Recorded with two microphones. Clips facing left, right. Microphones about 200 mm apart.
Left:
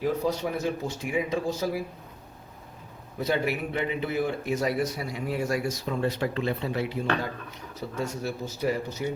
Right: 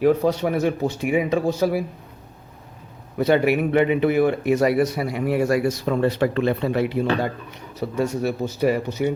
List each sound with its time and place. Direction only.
0.0 s speech: 65° right (ahead or behind)
3.2 s speech: 65° right (ahead or behind)